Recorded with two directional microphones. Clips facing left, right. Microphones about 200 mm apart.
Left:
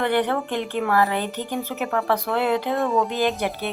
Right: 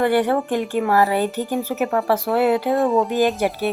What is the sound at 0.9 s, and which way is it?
Speech, 40° right (ahead or behind).